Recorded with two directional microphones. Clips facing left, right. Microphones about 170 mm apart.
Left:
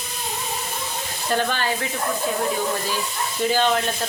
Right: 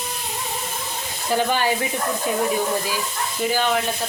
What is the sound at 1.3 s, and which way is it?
Speech, 15° right (ahead or behind).